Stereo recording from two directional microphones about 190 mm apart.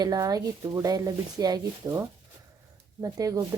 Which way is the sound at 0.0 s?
20° right (ahead or behind).